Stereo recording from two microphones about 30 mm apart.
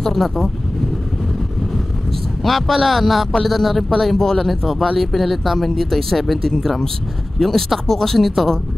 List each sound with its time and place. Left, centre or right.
0.0 s speech: centre
2.4 s speech: centre
4.2 s speech: centre
4.5 s speech: centre